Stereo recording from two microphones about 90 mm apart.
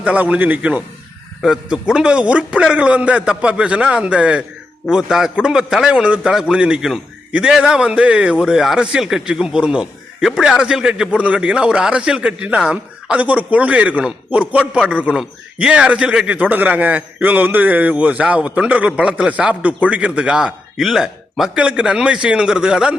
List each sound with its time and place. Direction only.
0.0 s a man's voice: 15° right (ahead or behind)